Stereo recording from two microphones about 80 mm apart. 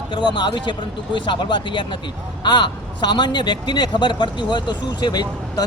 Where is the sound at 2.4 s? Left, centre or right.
Left.